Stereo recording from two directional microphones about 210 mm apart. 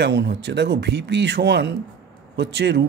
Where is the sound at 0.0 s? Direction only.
55° right (ahead or behind).